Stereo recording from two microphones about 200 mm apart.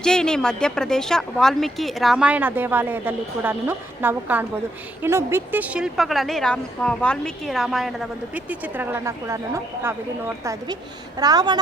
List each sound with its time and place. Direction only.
0.0 s speech: 5° left (ahead or behind); by 9.4 s 15° right (ahead or behind)
10.4 s a woman's voice: 15° right (ahead or behind)